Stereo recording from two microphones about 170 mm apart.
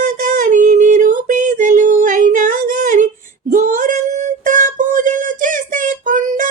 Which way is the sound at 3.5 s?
50° right (ahead or behind).